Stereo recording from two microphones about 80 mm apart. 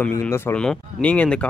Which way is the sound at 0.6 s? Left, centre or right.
Centre.